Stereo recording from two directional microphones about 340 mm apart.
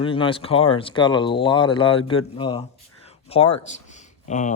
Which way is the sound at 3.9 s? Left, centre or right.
Left.